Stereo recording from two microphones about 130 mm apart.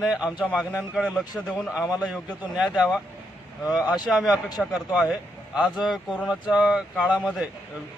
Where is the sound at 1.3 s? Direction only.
5° left (ahead or behind).